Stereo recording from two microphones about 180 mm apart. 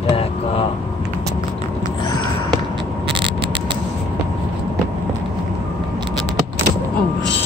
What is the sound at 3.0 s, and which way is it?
Vehicle, 30° right (ahead or behind).